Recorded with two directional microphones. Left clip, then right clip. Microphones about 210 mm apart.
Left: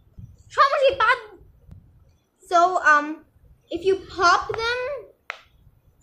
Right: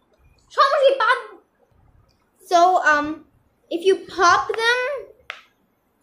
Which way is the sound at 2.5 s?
20° right (ahead or behind).